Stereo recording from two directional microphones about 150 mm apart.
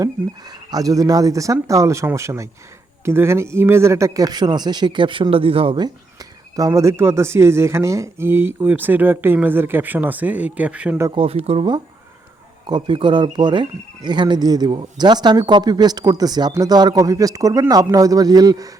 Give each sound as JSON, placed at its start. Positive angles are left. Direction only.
{"t": 0.7, "sound": "speech", "side_deg": -25}
{"t": 6.6, "sound": "speech", "side_deg": -20}
{"t": 11.1, "sound": "speech", "side_deg": -40}